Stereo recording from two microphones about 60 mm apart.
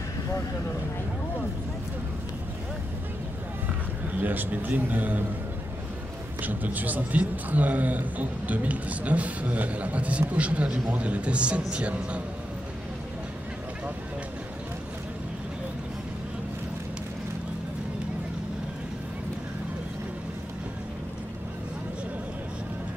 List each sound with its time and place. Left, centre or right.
4.2 s a man's voice: right
6.4 s a man's voice: right